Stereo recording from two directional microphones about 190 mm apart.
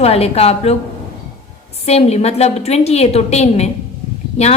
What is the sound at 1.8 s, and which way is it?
A woman's voice, 35° left (ahead or behind).